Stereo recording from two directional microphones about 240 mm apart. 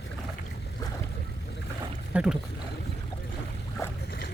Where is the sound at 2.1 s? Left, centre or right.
Centre.